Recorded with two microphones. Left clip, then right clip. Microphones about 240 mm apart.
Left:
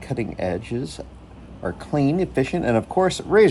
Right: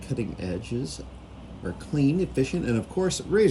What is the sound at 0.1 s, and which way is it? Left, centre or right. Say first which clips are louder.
Speech: left 7 dB; left.